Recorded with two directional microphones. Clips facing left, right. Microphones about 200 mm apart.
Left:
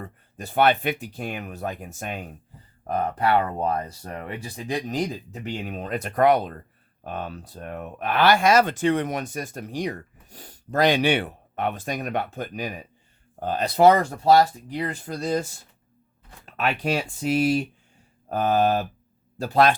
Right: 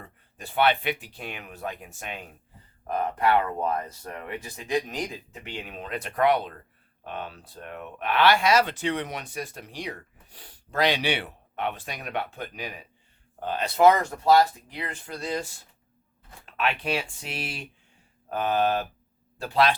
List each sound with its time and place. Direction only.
0.0 s speech: 45° left (ahead or behind)
16.5 s speech: 45° left (ahead or behind)